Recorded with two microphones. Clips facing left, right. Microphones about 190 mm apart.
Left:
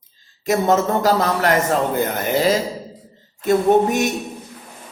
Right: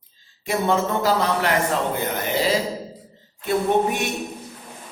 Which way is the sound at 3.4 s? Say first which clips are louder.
Left 5 dB; 40° left (ahead or behind).